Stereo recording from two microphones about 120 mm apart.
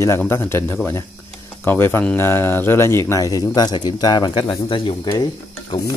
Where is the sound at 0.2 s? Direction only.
20° left (ahead or behind); by 5.1 s 40° left (ahead or behind).